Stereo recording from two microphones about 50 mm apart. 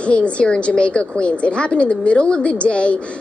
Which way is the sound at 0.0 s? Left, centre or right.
Left.